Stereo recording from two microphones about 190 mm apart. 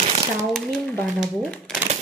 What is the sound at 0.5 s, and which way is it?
Speech, centre (ahead or behind).